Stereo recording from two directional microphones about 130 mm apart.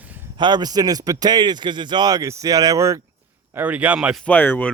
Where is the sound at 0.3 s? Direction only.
35° right (ahead or behind).